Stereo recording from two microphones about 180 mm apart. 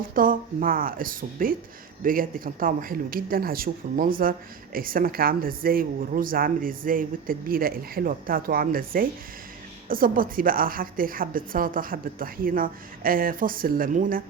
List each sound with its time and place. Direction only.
0.1 s speech: 50° right (ahead or behind)